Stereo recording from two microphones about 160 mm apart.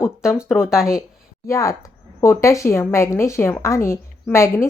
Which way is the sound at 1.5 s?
20° left (ahead or behind).